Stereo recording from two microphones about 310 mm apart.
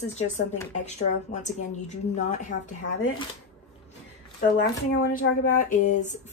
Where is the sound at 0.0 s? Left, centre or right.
Left.